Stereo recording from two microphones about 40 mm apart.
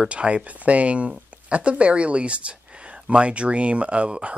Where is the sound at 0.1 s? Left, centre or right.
Right.